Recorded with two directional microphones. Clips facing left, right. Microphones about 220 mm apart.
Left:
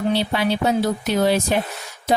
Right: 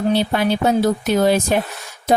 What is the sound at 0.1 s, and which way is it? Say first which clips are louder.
Speech: right 4 dB; 50° right (ahead or behind).